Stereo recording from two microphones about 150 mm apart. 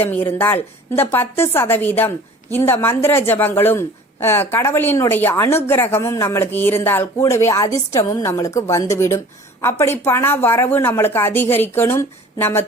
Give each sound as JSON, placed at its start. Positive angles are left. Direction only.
{"t": 0.0, "sound": "a woman's voice", "side_deg": 15}